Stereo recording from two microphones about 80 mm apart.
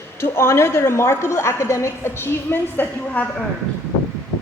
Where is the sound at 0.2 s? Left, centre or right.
Left.